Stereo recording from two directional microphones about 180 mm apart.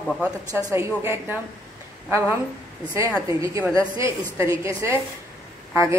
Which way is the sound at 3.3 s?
15° right (ahead or behind).